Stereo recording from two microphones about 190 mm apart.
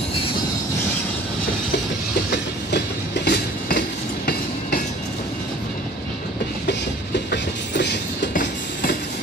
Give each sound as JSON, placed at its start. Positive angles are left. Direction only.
{"t": 3.3, "sound": "train", "side_deg": 55}
{"t": 8.3, "sound": "train", "side_deg": 45}